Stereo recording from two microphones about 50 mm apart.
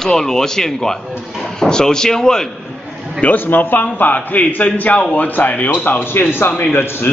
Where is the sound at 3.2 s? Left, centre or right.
Left.